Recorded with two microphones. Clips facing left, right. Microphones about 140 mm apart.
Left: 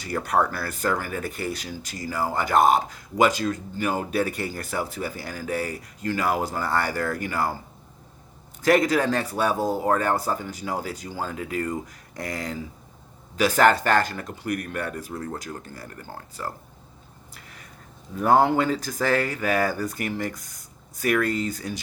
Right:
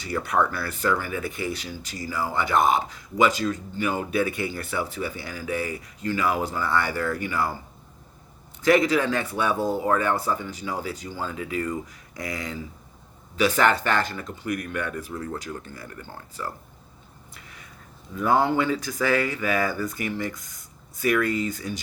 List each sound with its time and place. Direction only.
0.0 s speech: 40° left (ahead or behind)
8.6 s speech: 45° left (ahead or behind)
18.1 s speech: 45° left (ahead or behind)